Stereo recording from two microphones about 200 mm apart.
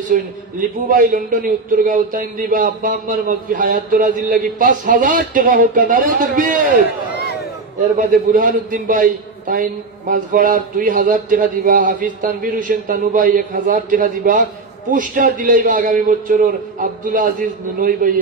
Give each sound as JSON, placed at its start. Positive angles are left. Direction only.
{"t": 0.1, "sound": "a man's voice", "side_deg": -45}
{"t": 8.0, "sound": "a man's voice", "side_deg": -40}